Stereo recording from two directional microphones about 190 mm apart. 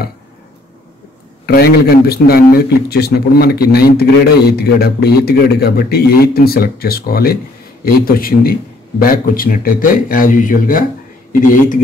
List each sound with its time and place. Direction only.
1.4 s a man's voice: 55° left (ahead or behind)